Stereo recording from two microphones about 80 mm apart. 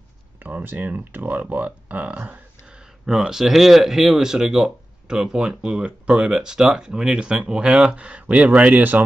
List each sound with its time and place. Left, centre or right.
0.4 s speech: right
3.1 s speech: centre